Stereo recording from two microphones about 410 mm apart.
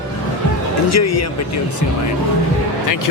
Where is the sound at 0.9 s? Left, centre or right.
Left.